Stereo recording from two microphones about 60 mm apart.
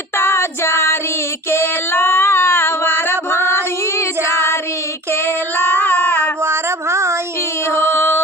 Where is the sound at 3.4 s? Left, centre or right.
Left.